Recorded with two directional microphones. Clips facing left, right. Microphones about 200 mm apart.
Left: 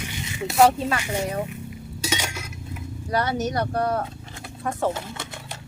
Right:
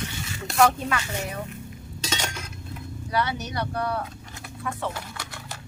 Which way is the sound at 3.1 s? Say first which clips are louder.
Left 4 dB; 45° left (ahead or behind).